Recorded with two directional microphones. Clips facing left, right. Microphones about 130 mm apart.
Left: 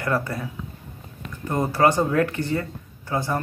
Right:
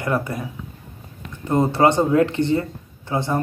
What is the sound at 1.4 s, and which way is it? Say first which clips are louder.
Speech: right 3 dB; 25° right (ahead or behind).